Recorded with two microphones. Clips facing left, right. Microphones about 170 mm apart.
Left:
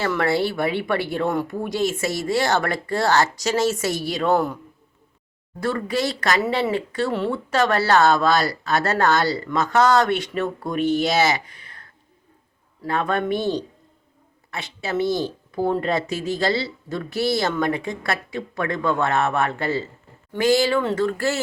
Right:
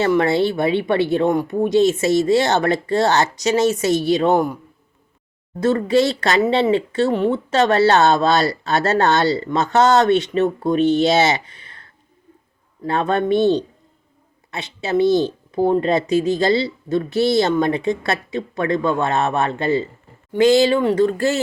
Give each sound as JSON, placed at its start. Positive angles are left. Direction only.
{"t": 0.0, "sound": "speech", "side_deg": -20}
{"t": 5.5, "sound": "speech", "side_deg": -25}